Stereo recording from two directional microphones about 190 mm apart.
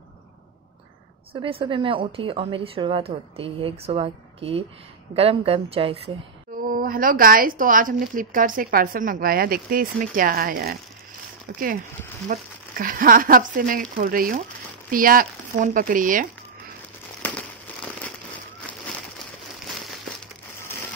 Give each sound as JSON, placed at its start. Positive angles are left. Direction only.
{"t": 1.3, "sound": "a woman's voice", "side_deg": -30}
{"t": 6.7, "sound": "a woman's voice", "side_deg": -50}
{"t": 12.3, "sound": "a woman's voice", "side_deg": -50}